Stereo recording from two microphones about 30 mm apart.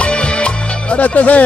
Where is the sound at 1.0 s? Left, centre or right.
Left.